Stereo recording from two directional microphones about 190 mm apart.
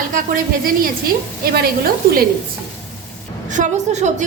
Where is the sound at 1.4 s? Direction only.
55° right (ahead or behind).